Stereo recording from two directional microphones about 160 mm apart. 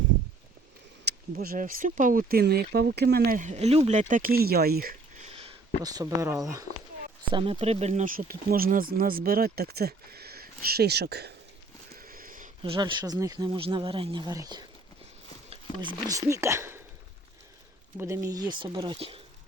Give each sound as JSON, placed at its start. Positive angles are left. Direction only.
{"t": 1.0, "sound": "speech", "side_deg": -65}
{"t": 4.1, "sound": "speech", "side_deg": -65}
{"t": 5.2, "sound": "a sound", "side_deg": -35}
{"t": 5.8, "sound": "speech", "side_deg": -25}
{"t": 7.3, "sound": "speech", "side_deg": -30}
{"t": 11.9, "sound": "a sound", "side_deg": -60}
{"t": 12.6, "sound": "speech", "side_deg": -30}
{"t": 17.9, "sound": "speech", "side_deg": -15}